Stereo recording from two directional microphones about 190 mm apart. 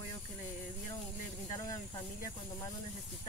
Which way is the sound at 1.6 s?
20° left (ahead or behind).